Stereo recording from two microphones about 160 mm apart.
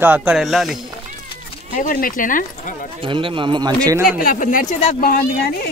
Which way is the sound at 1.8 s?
60° left (ahead or behind).